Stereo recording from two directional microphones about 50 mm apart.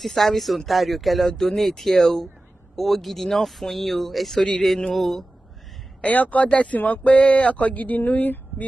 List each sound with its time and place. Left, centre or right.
0.0 s speech: centre
5.9 s speech: left